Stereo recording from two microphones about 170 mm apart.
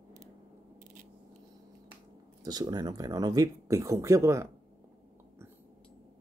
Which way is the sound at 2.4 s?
25° right (ahead or behind).